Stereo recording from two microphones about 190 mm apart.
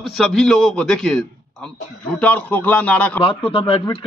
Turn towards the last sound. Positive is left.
turn(degrees=25)  # may be behind; listen again after turning